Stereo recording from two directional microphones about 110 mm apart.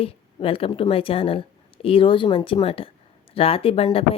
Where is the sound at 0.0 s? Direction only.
55° left (ahead or behind).